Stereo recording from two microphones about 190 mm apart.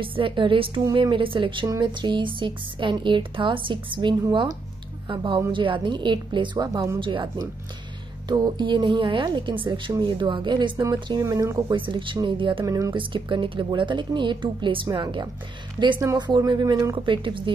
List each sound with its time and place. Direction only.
0.0 s a woman's voice: 25° right (ahead or behind)